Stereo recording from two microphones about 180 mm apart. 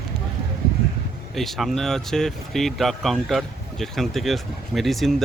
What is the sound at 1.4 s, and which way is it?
Speech, centre (ahead or behind).